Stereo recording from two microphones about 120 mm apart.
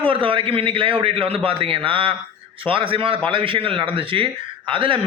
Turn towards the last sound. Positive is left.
turn(degrees=-45)  # may be behind; listen again after turning